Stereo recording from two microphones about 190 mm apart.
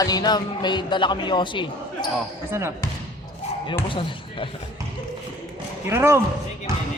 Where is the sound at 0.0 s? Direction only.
20° left (ahead or behind).